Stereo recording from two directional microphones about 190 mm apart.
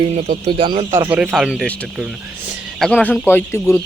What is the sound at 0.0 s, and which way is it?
Speech, 30° right (ahead or behind).